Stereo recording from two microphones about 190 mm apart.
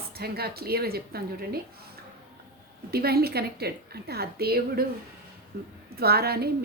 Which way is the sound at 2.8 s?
55° right (ahead or behind).